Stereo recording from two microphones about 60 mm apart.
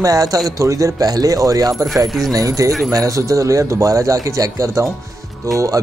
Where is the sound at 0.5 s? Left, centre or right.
Right.